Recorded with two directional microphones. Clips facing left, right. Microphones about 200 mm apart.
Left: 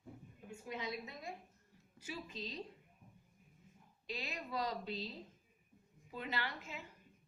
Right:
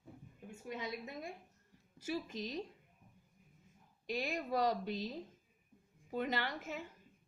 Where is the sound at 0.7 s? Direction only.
50° right (ahead or behind).